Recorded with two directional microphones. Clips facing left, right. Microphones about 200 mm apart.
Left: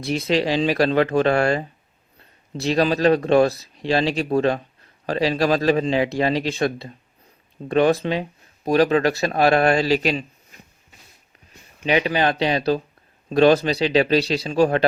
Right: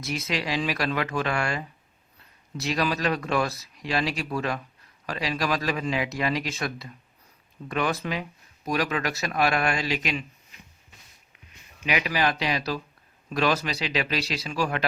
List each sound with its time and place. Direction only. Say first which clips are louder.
0.0 s speech: left 9 dB; 30° left (ahead or behind)
11.9 s speech: left 6 dB; 30° left (ahead or behind)